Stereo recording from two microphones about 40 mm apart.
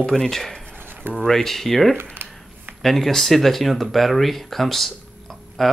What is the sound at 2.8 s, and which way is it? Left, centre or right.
Speech, centre.